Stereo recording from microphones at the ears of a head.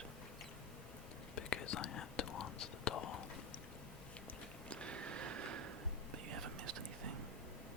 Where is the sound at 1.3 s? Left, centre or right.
Left.